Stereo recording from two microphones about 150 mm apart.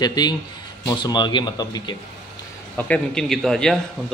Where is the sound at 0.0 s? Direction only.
30° left (ahead or behind).